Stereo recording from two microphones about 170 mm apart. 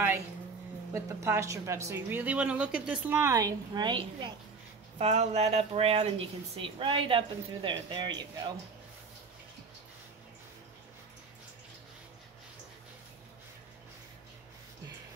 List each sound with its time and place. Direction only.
0.9 s speech: 15° right (ahead or behind)
4.9 s speech: 40° right (ahead or behind)